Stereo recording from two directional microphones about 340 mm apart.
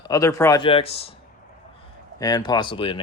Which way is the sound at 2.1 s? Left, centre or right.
Centre.